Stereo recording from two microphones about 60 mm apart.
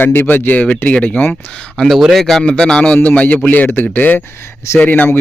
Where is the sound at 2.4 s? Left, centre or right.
Centre.